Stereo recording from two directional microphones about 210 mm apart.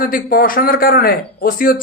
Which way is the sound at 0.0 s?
45° left (ahead or behind).